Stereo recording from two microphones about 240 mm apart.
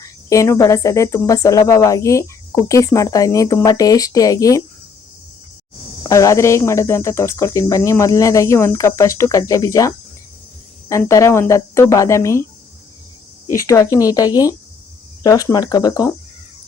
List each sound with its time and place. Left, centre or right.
0.0 s speech: centre
6.0 s speech: centre
13.5 s speech: centre